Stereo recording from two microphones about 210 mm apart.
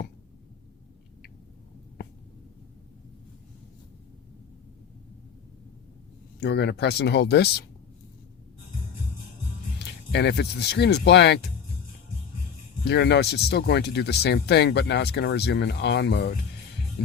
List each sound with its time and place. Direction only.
6.4 s speech: 50° left (ahead or behind)
9.7 s speech: 55° left (ahead or behind)
12.8 s speech: 55° left (ahead or behind)